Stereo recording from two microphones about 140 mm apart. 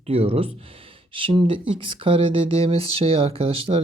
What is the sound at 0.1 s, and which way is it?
Speech, 45° right (ahead or behind).